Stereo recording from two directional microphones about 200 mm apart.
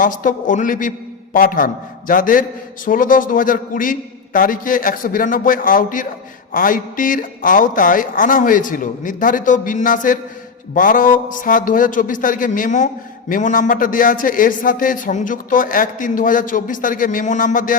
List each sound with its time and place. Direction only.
0.0 s a man's voice: 40° left (ahead or behind)